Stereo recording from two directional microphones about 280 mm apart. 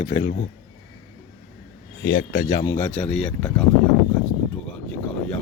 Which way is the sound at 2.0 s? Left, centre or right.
Left.